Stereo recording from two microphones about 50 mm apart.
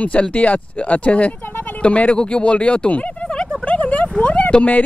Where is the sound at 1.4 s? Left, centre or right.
Left.